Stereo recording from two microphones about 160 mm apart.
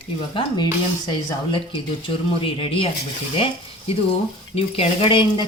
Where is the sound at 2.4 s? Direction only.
35° left (ahead or behind).